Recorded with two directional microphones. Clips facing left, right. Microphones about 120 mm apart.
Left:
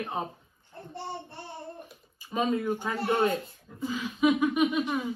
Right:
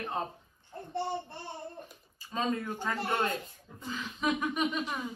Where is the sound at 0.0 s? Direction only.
15° left (ahead or behind).